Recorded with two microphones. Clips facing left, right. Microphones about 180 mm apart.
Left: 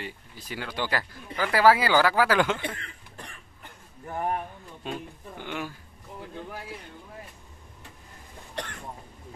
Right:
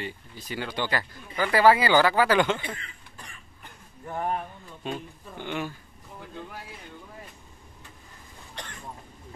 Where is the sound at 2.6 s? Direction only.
60° left (ahead or behind).